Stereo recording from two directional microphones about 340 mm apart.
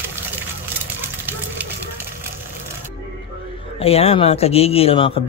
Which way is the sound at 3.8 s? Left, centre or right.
Centre.